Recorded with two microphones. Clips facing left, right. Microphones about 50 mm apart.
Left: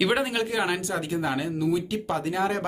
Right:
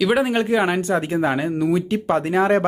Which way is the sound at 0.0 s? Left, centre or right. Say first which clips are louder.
Right 5 dB; centre.